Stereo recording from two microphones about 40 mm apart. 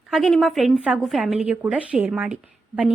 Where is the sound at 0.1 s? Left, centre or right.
Centre.